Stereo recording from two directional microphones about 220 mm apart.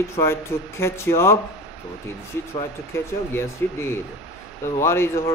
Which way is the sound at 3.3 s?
10° left (ahead or behind).